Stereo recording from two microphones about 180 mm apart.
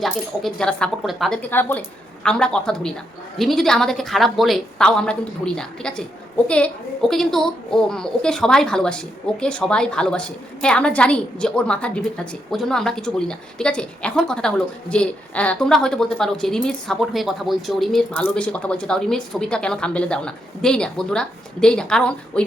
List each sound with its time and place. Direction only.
0.0 s a woman's voice: centre (ahead or behind)
7.1 s a woman's voice: centre (ahead or behind)